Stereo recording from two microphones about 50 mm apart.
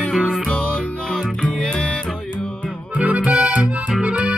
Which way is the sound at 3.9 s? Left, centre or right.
Right.